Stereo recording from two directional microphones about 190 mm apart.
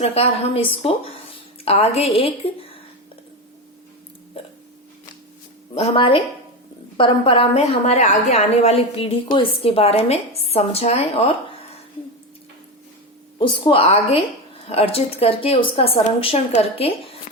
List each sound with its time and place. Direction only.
0.0 s a woman's voice: 30° left (ahead or behind)
4.4 s hiccup: 30° left (ahead or behind)
5.7 s a woman's voice: 30° left (ahead or behind)
13.4 s a woman's voice: 25° left (ahead or behind)